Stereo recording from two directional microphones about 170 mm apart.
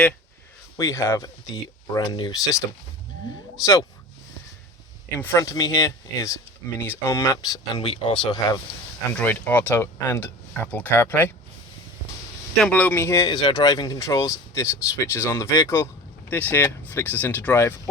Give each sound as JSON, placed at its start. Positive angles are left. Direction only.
{"t": 0.8, "sound": "speech", "side_deg": 20}
{"t": 3.6, "sound": "speech", "side_deg": 20}
{"t": 5.2, "sound": "speech", "side_deg": 15}
{"t": 7.8, "sound": "speech", "side_deg": 35}
{"t": 8.3, "sound": "speech", "side_deg": 20}
{"t": 9.1, "sound": "speech", "side_deg": 10}
{"t": 12.5, "sound": "speech", "side_deg": 5}